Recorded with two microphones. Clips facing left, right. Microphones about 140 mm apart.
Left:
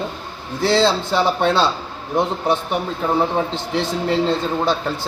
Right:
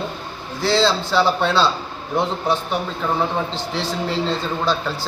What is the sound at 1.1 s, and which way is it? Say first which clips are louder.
Speech: even; 20° left (ahead or behind).